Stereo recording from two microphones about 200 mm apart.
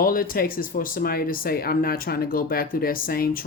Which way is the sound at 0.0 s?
45° left (ahead or behind).